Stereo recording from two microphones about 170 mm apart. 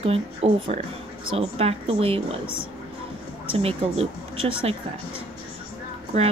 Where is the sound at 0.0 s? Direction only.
35° right (ahead or behind).